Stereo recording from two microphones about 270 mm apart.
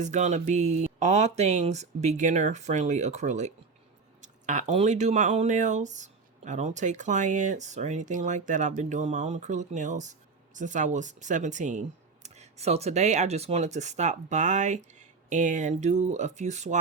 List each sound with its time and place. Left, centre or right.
0.0 s speech: right